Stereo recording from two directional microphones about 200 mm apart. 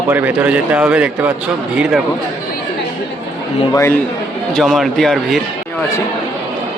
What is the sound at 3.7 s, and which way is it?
Speech, 10° left (ahead or behind).